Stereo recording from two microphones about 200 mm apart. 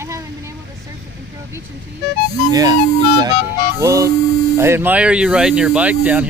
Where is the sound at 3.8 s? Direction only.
15° right (ahead or behind).